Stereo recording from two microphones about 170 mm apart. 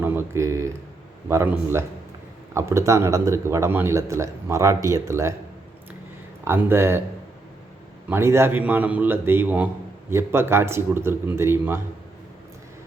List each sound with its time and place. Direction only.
0.0 s a sound: 15° right (ahead or behind)
1.3 s a man's voice: 15° right (ahead or behind)
6.4 s a man's voice: 15° right (ahead or behind)
8.1 s a man's voice: 15° right (ahead or behind)